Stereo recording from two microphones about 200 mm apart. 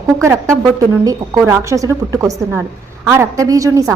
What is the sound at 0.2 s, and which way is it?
A woman's voice, 15° right (ahead or behind).